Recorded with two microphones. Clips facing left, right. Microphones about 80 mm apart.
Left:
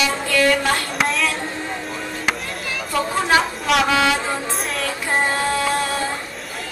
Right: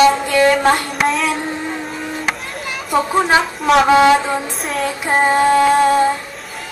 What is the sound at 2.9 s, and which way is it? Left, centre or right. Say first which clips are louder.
Female singing: right 6 dB; right.